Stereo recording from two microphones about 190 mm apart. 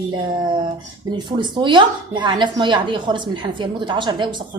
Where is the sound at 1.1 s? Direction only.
25° right (ahead or behind).